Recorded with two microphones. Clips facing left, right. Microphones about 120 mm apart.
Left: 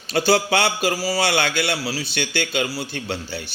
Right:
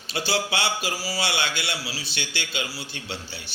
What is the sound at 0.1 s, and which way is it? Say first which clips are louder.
A man's voice: left 8 dB; 50° left (ahead or behind).